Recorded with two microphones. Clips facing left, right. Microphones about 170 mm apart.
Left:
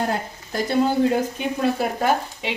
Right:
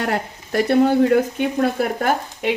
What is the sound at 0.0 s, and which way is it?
Speech, 70° right (ahead or behind).